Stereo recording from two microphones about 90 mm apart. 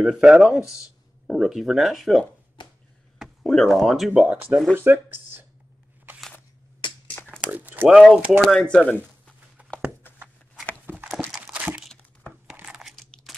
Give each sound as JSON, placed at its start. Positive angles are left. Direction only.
{"t": 0.0, "sound": "speech", "side_deg": -5}
{"t": 2.6, "sound": "chop", "side_deg": 60}
{"t": 3.2, "sound": "speech", "side_deg": 0}
{"t": 4.7, "sound": "speech", "side_deg": -25}
{"t": 7.5, "sound": "a sound", "side_deg": -20}
{"t": 7.9, "sound": "speech", "side_deg": 0}
{"t": 8.5, "sound": "speech", "side_deg": 10}
{"t": 9.6, "sound": "a sound", "side_deg": -15}
{"t": 11.4, "sound": "crumpling", "side_deg": -15}
{"t": 12.6, "sound": "a sound", "side_deg": -5}